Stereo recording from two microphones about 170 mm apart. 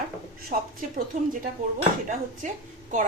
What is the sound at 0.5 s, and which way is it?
Speech, 60° right (ahead or behind).